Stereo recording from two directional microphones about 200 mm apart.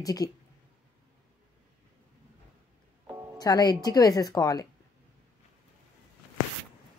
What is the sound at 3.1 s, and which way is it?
Music, 15° right (ahead or behind).